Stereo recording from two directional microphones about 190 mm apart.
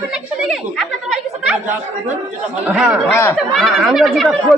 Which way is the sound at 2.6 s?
5° right (ahead or behind).